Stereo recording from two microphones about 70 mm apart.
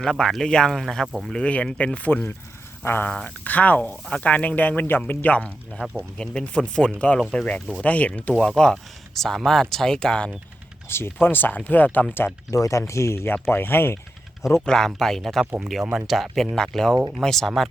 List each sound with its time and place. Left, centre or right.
0.0 s speech: centre; by 3.1 s left
3.1 s speech: centre
3.4 s speech: left
8.4 s speech: centre
10.8 s speech: left
12.5 s speech: left
14.7 s speech: centre